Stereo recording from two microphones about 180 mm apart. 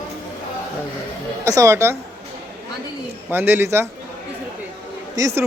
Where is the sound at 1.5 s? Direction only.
15° right (ahead or behind).